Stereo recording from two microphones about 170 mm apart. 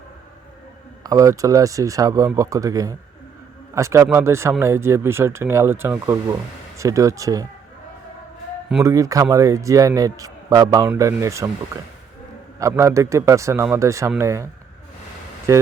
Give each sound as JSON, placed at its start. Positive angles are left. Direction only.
{"t": 1.0, "sound": "speech", "side_deg": -20}
{"t": 8.8, "sound": "speech", "side_deg": -20}
{"t": 12.5, "sound": "speech", "side_deg": -15}